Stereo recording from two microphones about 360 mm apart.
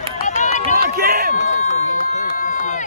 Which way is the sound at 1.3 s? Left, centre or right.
Centre.